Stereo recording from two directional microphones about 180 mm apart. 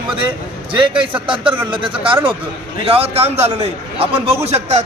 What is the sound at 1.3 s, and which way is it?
A man's voice, 30° right (ahead or behind).